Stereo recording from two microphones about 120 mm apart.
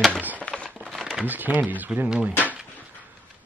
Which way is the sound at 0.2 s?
15° right (ahead or behind).